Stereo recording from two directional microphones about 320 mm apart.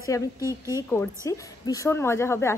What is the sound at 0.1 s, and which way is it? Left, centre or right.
A woman's voice, centre.